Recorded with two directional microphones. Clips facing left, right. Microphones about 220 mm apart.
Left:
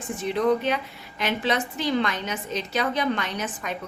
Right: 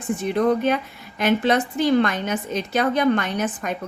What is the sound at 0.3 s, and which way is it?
A woman's voice, 50° right (ahead or behind).